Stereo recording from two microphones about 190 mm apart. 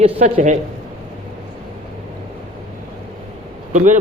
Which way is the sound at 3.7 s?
40° right (ahead or behind).